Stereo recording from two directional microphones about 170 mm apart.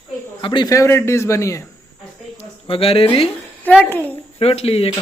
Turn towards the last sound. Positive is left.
turn(degrees=35)  # may be behind; listen again after turning